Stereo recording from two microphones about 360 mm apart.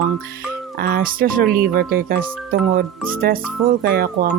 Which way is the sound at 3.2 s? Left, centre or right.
Right.